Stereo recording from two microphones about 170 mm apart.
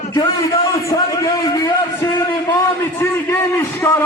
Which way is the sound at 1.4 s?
20° left (ahead or behind).